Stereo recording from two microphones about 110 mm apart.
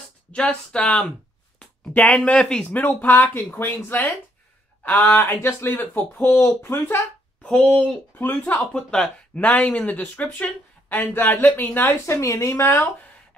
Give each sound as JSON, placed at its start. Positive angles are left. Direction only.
{"t": 0.3, "sound": "speech", "side_deg": 10}
{"t": 7.4, "sound": "speech", "side_deg": 10}